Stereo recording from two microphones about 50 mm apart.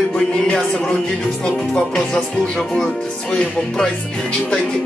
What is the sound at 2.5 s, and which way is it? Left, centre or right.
Speech, centre.